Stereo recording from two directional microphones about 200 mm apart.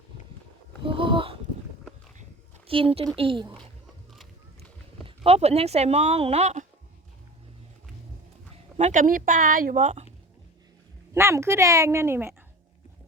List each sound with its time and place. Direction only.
0.9 s a sound: 25° right (ahead or behind)
2.6 s speech: 30° right (ahead or behind)
4.1 s a sound: centre (ahead or behind)
5.0 s speech: 30° right (ahead or behind)
8.8 s speech: 40° right (ahead or behind)
11.1 s a woman's voice: 15° right (ahead or behind)